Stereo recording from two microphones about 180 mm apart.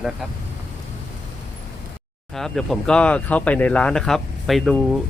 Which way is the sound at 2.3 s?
Centre (ahead or behind).